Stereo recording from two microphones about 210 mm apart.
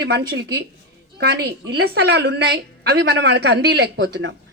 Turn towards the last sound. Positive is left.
turn(degrees=-60)  # may be behind; listen again after turning